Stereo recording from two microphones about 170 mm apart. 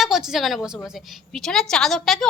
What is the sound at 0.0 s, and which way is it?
A woman's voice, centre (ahead or behind).